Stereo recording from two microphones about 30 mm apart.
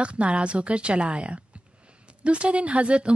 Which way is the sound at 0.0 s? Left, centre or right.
Right.